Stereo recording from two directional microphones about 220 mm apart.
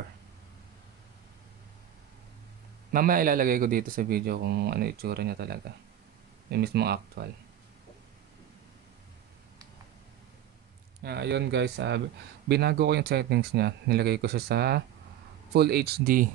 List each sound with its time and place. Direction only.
2.9 s speech: 40° right (ahead or behind)
11.0 s speech: 45° right (ahead or behind)